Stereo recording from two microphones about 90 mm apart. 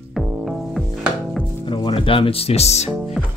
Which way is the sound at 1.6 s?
65° left (ahead or behind).